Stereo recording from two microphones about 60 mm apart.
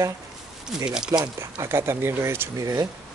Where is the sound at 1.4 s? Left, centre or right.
Right.